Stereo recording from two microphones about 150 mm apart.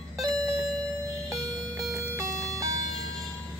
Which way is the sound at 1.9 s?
20° right (ahead or behind).